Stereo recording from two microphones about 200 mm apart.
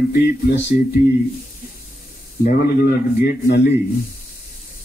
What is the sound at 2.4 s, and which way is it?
A man's voice, 45° left (ahead or behind).